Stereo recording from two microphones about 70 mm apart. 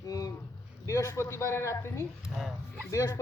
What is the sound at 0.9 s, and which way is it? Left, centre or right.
A man's voice, left.